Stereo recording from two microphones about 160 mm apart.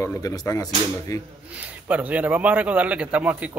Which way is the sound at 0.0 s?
20° left (ahead or behind).